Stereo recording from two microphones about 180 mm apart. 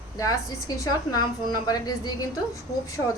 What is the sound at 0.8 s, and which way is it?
A woman's voice, 20° left (ahead or behind).